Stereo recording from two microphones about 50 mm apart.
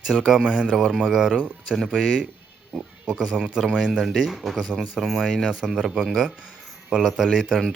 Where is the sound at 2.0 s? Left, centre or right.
Centre.